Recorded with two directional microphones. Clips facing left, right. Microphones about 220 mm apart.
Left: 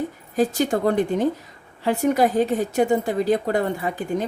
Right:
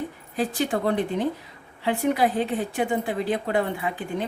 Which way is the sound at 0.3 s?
45° left (ahead or behind).